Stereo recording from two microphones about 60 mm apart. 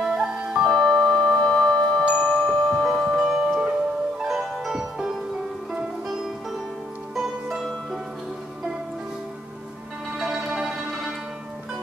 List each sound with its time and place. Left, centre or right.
0.0 s music: centre
0.7 s music: centre
2.0 s glockenspiel: left
2.8 s music: centre
4.2 s music: centre
7.2 s music: centre
10.1 s music: centre